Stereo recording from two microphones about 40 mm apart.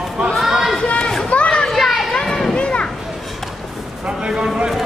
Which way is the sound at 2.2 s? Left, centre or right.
Centre.